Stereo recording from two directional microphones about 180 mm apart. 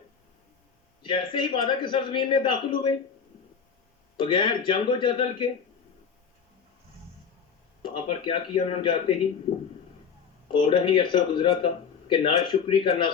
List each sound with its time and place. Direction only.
1.0 s a man's voice: 25° left (ahead or behind)
4.2 s a man's voice: 25° left (ahead or behind)
7.8 s a man's voice: 30° left (ahead or behind)
10.5 s a man's voice: 30° left (ahead or behind)